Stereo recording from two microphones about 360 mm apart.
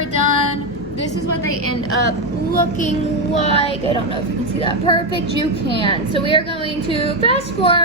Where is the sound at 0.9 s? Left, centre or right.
Left.